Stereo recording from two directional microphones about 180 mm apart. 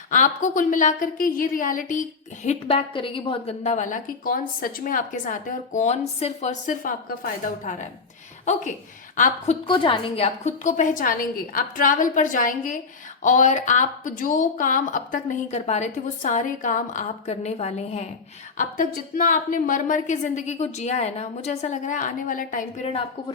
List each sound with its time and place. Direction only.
0.1 s a woman's voice: 45° left (ahead or behind)
9.1 s a woman's voice: 45° left (ahead or behind)
9.6 s a woman's voice: 25° left (ahead or behind)
18.5 s a woman's voice: 50° left (ahead or behind)